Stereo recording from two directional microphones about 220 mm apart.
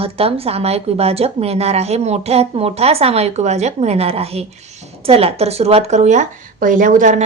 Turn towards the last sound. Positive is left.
turn(degrees=-35)  # may be behind; listen again after turning